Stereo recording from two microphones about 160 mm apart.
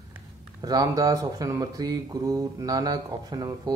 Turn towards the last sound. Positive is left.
turn(degrees=-25)  # may be behind; listen again after turning